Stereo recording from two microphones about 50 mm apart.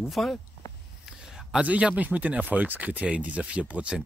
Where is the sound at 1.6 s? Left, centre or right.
Right.